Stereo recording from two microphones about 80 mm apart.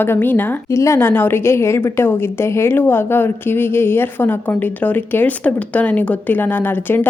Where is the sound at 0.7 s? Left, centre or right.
Left.